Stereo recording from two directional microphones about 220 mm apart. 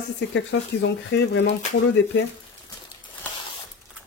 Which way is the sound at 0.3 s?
55° left (ahead or behind).